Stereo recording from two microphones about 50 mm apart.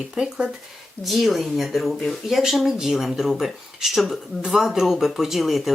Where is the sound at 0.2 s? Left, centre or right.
Centre.